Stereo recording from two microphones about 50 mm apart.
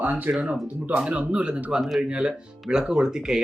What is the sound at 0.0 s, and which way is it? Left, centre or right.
Speech, right.